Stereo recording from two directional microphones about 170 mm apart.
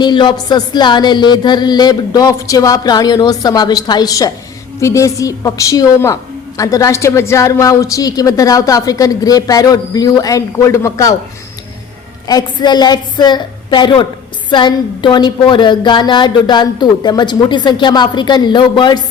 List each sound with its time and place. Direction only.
0.0 s a woman's voice: 25° left (ahead or behind)
12.3 s a woman's voice: 25° left (ahead or behind)